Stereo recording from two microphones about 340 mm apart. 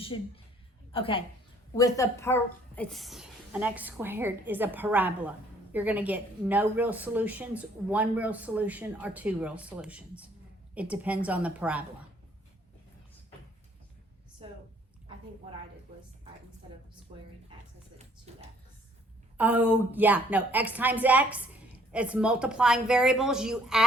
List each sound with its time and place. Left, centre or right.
0.9 s a woman's voice: centre
14.4 s a woman's voice: centre
17.1 s a woman's voice: centre
18.3 s a sound: centre
19.4 s speech: centre